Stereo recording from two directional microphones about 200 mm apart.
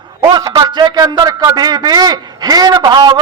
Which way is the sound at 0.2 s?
20° right (ahead or behind).